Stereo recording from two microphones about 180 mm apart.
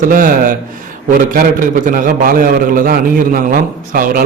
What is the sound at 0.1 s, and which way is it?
A man's voice, 50° right (ahead or behind).